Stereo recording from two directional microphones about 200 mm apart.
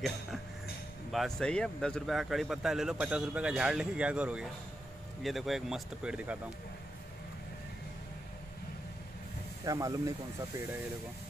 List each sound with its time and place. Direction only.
1.1 s speech: 5° left (ahead or behind)
9.7 s speech: 15° right (ahead or behind)